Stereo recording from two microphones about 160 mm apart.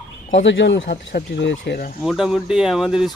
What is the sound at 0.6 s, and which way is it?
Speech, 90° left.